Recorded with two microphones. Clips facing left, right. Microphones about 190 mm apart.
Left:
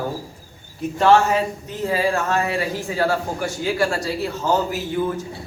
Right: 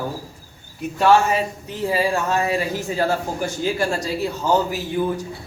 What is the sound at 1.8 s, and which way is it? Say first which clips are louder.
Speech: even; 15° right (ahead or behind).